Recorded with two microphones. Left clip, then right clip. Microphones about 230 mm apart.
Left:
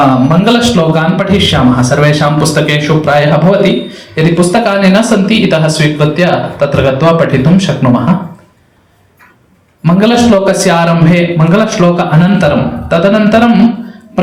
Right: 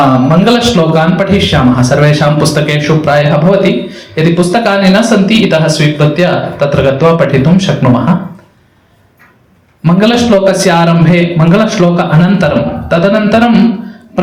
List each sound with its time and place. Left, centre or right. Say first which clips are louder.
0.3 s a man's voice: right 1 dB; right
9.8 s a man's voice: left 1 dB; right